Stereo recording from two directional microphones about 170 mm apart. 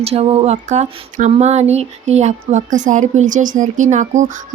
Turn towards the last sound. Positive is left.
turn(degrees=-45)  # may be behind; listen again after turning